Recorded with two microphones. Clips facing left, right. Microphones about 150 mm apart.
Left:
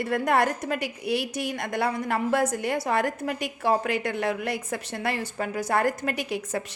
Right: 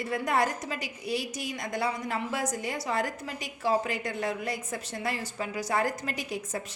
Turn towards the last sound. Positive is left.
turn(degrees=65)  # may be behind; listen again after turning